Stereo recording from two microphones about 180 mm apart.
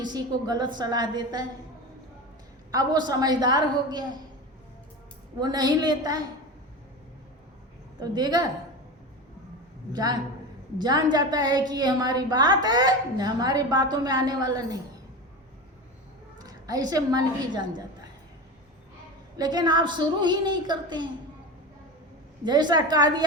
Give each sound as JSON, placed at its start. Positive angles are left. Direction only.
{"t": 0.0, "sound": "a woman's voice", "side_deg": -20}
{"t": 2.7, "sound": "a woman's voice", "side_deg": -20}
{"t": 5.4, "sound": "a woman's voice", "side_deg": -25}
{"t": 7.9, "sound": "a woman's voice", "side_deg": -25}
{"t": 9.9, "sound": "a woman's voice", "side_deg": -25}
{"t": 16.4, "sound": "a woman's voice", "side_deg": -20}
{"t": 19.4, "sound": "a woman's voice", "side_deg": -25}
{"t": 22.4, "sound": "a woman's voice", "side_deg": -25}